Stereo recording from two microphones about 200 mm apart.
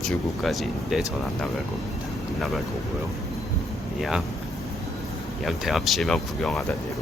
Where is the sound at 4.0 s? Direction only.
Centre (ahead or behind).